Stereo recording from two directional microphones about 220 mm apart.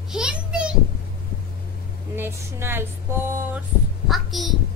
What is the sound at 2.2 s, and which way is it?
Speech, 10° right (ahead or behind).